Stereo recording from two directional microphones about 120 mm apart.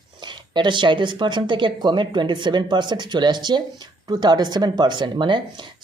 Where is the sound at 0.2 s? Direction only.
40° right (ahead or behind).